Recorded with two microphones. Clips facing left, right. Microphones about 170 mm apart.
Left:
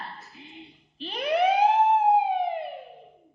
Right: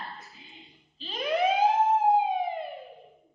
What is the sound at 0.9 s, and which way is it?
Siren, 65° left (ahead or behind).